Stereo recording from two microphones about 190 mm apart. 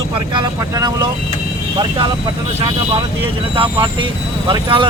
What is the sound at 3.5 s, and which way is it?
Speech, 25° right (ahead or behind).